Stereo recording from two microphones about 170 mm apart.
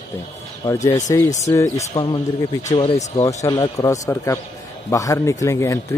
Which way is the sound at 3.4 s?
20° left (ahead or behind).